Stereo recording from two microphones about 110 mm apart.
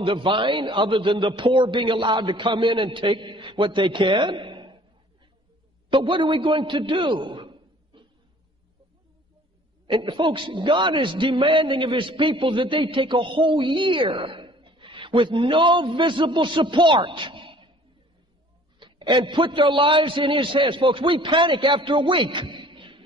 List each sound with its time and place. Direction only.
0.0 s a man's voice: 50° right (ahead or behind)
5.9 s a man's voice: 50° right (ahead or behind)
9.8 s a man's voice: 45° right (ahead or behind)
18.8 s a man's voice: 45° right (ahead or behind)